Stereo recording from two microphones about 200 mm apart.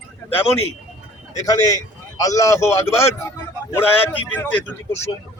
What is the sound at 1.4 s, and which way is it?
A man's voice, 20° left (ahead or behind).